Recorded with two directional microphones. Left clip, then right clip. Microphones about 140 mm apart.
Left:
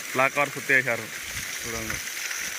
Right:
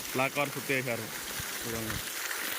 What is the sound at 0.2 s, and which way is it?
Speech, 15° right (ahead or behind).